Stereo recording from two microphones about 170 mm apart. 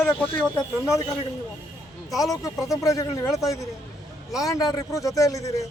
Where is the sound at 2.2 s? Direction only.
20° left (ahead or behind).